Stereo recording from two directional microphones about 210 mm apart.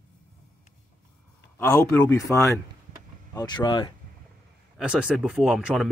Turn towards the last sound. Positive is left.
turn(degrees=0)  # may be behind; listen again after turning